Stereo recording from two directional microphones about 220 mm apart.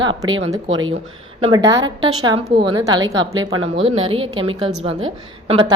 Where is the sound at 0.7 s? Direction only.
65° right (ahead or behind).